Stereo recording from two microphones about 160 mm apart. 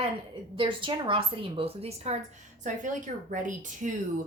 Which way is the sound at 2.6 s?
55° right (ahead or behind).